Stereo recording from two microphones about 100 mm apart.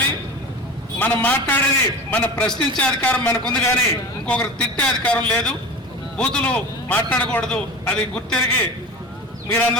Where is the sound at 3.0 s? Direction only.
15° left (ahead or behind).